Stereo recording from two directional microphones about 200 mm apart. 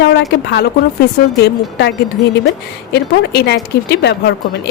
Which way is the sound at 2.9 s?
55° left (ahead or behind).